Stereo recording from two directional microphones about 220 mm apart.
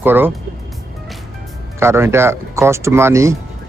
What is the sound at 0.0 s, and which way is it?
Speech, 10° right (ahead or behind).